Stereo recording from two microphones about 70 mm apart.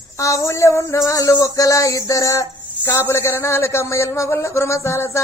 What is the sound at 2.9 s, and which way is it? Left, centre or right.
A man's voice, left.